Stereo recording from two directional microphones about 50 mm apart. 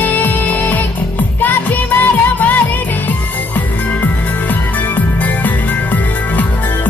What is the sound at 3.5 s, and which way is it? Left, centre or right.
Music, left.